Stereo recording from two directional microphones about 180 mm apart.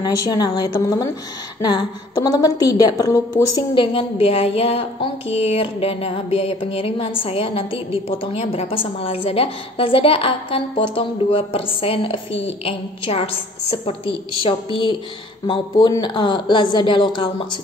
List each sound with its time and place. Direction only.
0.0 s a woman's voice: 20° left (ahead or behind)